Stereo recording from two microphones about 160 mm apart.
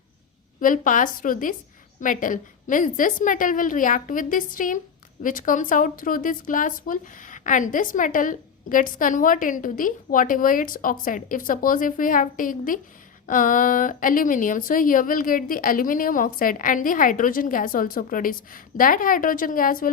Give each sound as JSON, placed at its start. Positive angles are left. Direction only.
{"t": 0.6, "sound": "a woman's voice", "side_deg": 55}